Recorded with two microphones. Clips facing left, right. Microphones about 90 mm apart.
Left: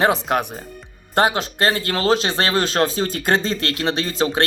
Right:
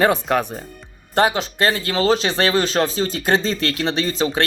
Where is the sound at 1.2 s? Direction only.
40° left (ahead or behind).